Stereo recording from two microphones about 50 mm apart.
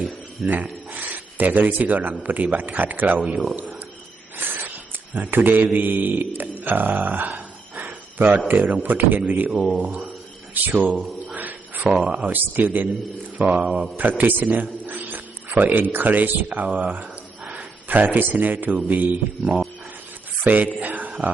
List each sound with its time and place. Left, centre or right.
0.4 s speech: right
4.4 s a sound: right
5.1 s a man's voice: right
6.7 s a sound: right
8.4 s a man's voice: right
11.3 s a sound: right
12.2 s a man's voice: right
13.4 s speech: right
13.9 s a man's voice: right
20.4 s speech: right
20.7 s mantra: right